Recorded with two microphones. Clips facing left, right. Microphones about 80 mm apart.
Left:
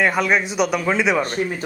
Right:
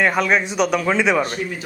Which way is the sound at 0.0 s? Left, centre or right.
Centre.